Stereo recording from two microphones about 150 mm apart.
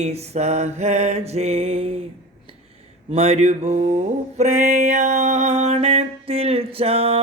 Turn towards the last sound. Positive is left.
turn(degrees=-40)  # may be behind; listen again after turning